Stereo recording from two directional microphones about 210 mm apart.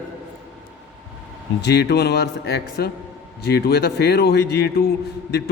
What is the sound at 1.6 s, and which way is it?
Speech, 55° left (ahead or behind).